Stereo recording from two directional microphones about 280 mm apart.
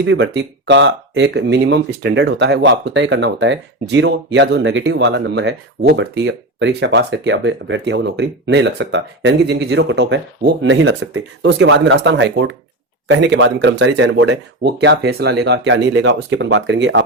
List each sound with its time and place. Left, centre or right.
0.0 s speech: right